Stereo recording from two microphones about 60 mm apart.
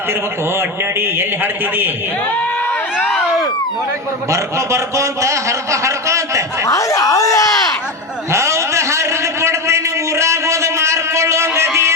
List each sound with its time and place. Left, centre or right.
4.3 s speech: right
6.7 s speech: left
8.3 s a sound: right